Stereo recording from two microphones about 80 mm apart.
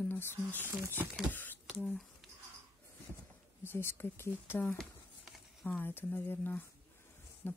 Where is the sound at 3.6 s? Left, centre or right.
Left.